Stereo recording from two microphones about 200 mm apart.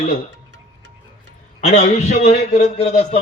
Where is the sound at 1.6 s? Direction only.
35° left (ahead or behind).